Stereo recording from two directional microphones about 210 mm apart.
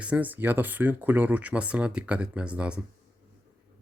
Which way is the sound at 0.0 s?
5° right (ahead or behind).